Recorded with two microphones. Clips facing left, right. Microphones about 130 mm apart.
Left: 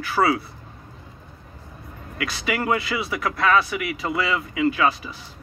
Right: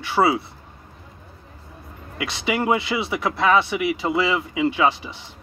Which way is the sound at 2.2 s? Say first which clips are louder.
Right 2 dB; 25° right (ahead or behind).